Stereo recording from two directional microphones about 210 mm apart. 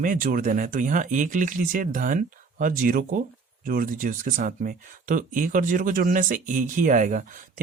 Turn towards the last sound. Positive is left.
turn(degrees=-40)  # may be behind; listen again after turning